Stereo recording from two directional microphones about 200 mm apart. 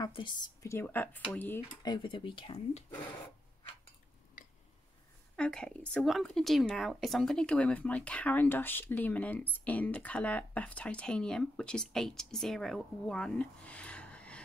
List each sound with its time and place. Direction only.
0.0 s speech: 25° left (ahead or behind); by 1.6 s 5° left (ahead or behind)
1.8 s speech: 20° left (ahead or behind)
4.4 s a sound: 40° left (ahead or behind)
5.3 s a woman's voice: 5° left (ahead or behind)